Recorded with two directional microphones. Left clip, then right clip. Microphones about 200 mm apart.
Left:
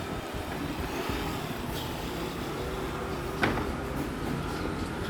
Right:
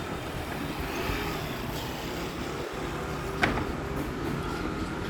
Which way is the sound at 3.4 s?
40° right (ahead or behind).